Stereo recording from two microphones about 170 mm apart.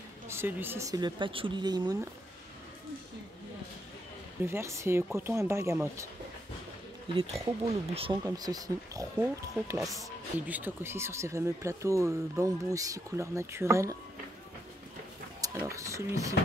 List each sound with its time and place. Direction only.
0.3 s speech: 10° right (ahead or behind)
4.4 s speech: 15° right (ahead or behind)
7.2 s speech: 35° right (ahead or behind)
8.2 s speech: 20° right (ahead or behind)
9.8 s speech: 5° right (ahead or behind)
15.5 s a sound: 15° right (ahead or behind)